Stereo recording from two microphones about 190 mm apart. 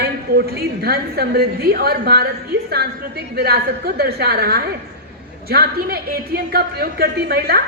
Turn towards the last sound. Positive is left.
turn(degrees=-55)  # may be behind; listen again after turning